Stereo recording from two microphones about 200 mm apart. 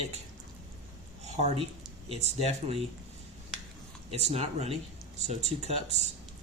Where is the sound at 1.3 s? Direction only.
30° right (ahead or behind).